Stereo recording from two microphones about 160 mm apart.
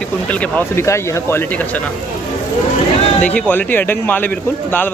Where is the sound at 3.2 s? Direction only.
10° left (ahead or behind).